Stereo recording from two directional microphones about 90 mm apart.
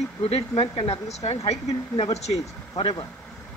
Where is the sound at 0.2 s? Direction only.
90° left.